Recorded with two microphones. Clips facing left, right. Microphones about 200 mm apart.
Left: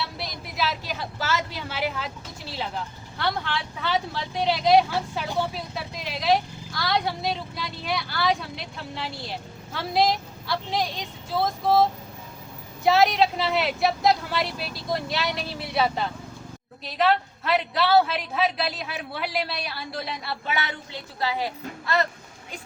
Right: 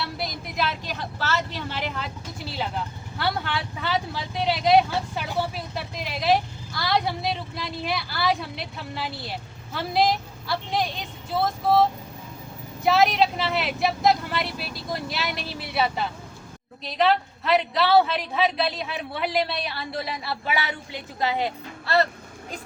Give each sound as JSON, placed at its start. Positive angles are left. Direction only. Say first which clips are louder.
{"t": 0.2, "sound": "speech", "louder": "right 3 dB", "side_deg": 0}
{"t": 21.2, "sound": "speech", "louder": "right 2 dB", "side_deg": -20}
{"t": 21.9, "sound": "speech", "louder": "right 3 dB", "side_deg": -35}